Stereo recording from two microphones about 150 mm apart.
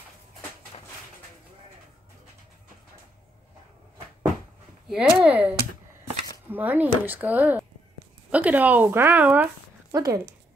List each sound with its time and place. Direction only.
4.8 s speech: 5° right (ahead or behind)
9.9 s speech: 25° right (ahead or behind)